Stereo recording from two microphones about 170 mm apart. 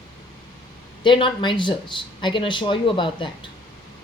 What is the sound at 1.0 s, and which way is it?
Speech, 30° left (ahead or behind).